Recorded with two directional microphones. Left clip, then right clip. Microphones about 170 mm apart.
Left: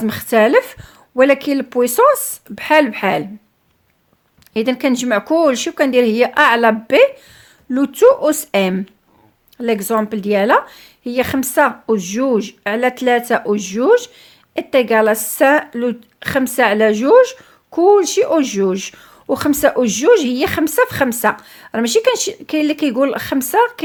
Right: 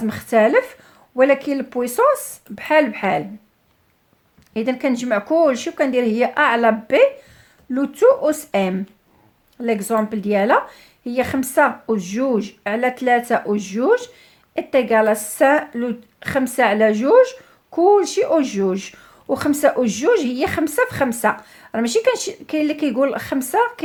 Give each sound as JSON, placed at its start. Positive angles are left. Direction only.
{"t": 0.0, "sound": "a woman's voice", "side_deg": 35}
{"t": 4.5, "sound": "a woman's voice", "side_deg": 35}